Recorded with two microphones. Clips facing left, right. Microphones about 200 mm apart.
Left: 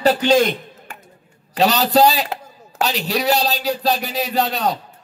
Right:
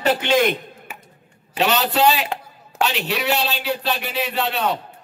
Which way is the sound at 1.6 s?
35° left (ahead or behind).